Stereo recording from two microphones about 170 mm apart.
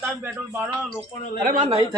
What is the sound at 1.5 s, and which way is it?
Speech, 40° right (ahead or behind).